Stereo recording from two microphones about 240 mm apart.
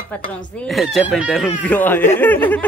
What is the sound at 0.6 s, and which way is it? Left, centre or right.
Speech, centre.